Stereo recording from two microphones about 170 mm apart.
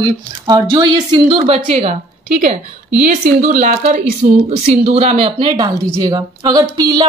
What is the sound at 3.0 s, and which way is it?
Speech, 50° right (ahead or behind).